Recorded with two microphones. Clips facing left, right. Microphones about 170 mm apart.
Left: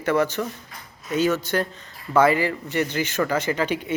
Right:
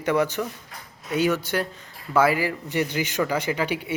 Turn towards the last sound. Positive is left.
turn(degrees=-10)  # may be behind; listen again after turning